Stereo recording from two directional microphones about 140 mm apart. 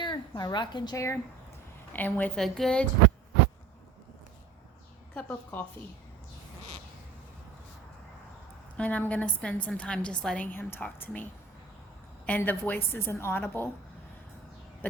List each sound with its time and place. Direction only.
0.0 s a woman's voice: 30° left (ahead or behind); by 2.8 s centre (ahead or behind)
5.1 s a woman's voice: 10° left (ahead or behind)
8.8 s a woman's voice: 10° left (ahead or behind)